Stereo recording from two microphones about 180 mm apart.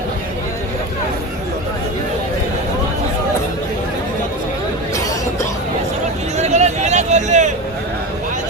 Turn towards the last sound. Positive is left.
turn(degrees=-40)  # may be behind; listen again after turning